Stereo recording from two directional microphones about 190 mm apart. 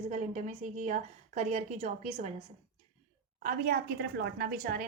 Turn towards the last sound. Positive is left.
turn(degrees=-50)  # may be behind; listen again after turning